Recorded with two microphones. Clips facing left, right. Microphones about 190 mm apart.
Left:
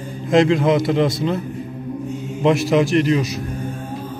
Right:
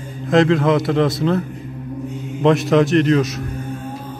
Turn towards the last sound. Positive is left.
turn(degrees=0)  # may be behind; listen again after turning